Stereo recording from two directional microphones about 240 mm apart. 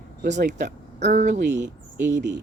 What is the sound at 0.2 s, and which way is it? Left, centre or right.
Speech, right.